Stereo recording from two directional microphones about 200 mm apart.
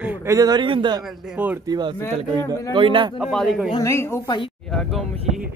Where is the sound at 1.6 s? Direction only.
20° right (ahead or behind).